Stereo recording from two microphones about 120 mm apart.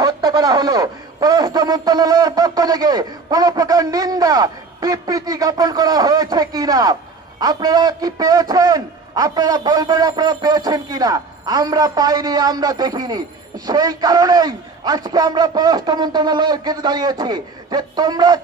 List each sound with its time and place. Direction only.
0.0 s speech: 35° right (ahead or behind)